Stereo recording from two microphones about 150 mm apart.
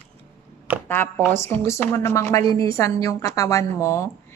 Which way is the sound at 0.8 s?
15° left (ahead or behind).